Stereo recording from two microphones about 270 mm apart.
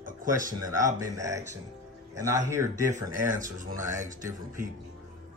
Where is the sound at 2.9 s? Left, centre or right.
Right.